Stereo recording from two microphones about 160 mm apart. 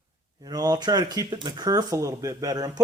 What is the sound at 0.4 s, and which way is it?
Speech, 25° right (ahead or behind).